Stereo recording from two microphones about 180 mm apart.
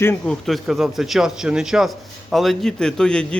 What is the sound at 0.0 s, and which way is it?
Speech, 10° left (ahead or behind).